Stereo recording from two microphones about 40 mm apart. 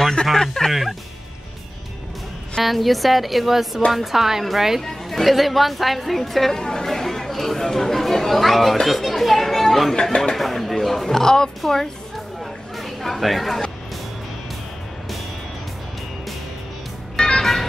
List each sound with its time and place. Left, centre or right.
0.0 s a sound: centre
0.7 s speech: centre
2.6 s a woman's voice: centre
12.7 s chatter: centre
17.2 s vehicle: centre